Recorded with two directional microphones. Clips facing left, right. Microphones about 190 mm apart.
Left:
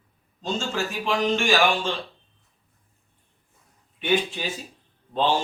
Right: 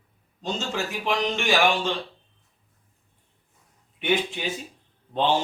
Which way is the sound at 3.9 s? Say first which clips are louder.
Left 1 dB; 15° right (ahead or behind).